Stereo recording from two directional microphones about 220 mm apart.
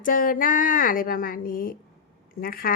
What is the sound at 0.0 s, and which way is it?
A woman's voice, 40° left (ahead or behind).